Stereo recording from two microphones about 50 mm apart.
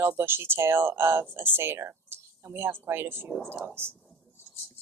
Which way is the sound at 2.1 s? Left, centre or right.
Right.